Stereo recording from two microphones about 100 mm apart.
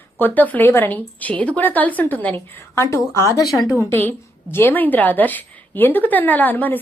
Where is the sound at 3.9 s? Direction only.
20° left (ahead or behind).